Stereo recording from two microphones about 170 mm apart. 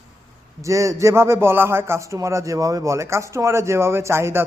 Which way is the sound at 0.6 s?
20° right (ahead or behind).